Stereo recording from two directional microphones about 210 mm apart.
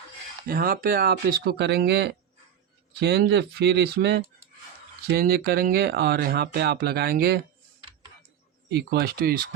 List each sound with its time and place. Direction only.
0.4 s speech: 45° right (ahead or behind)
8.7 s speech: 50° right (ahead or behind)